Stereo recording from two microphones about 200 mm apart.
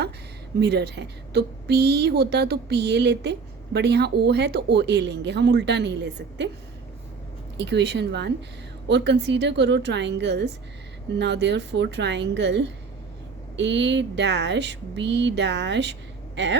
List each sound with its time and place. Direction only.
0.6 s a woman's voice: 55° right (ahead or behind)
7.5 s a woman's voice: 60° right (ahead or behind)